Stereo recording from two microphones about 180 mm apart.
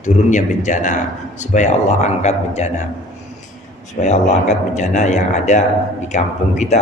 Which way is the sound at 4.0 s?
40° left (ahead or behind).